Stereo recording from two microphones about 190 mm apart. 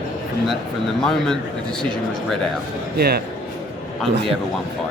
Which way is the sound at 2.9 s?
55° right (ahead or behind).